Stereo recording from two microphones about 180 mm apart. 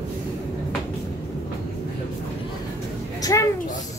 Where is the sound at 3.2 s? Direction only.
20° left (ahead or behind).